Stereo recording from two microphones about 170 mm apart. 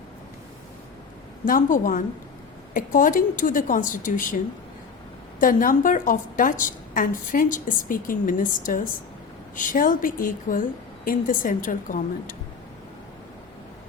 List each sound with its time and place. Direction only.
1.5 s a woman's voice: 50° left (ahead or behind)
5.4 s a woman's voice: 50° left (ahead or behind)